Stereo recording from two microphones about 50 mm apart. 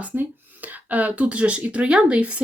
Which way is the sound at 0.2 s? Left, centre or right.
Right.